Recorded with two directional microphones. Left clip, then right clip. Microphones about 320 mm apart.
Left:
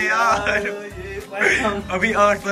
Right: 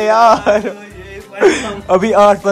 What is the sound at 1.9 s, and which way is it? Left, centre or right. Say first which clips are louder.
Speech: right 9 dB; centre.